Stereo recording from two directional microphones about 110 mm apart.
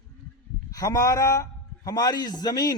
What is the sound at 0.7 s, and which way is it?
A man's voice, 30° left (ahead or behind).